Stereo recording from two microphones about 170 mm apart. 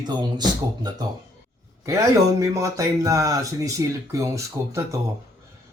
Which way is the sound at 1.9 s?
20° right (ahead or behind).